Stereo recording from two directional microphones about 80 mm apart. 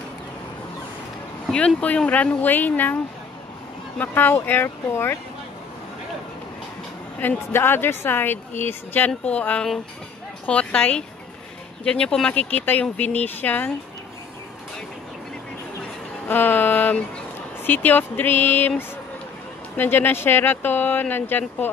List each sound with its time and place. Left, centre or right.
1.8 s a woman's voice: centre
4.0 s a woman's voice: left
7.2 s a woman's voice: left
16.3 s a woman's voice: left
19.8 s a woman's voice: left